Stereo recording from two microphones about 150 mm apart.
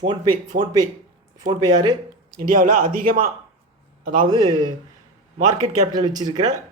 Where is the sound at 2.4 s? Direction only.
65° right (ahead or behind).